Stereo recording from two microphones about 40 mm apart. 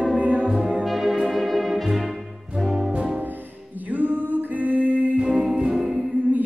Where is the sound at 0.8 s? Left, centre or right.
Centre.